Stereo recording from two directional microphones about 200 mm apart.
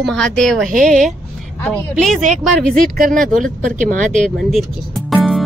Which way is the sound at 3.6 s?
40° right (ahead or behind).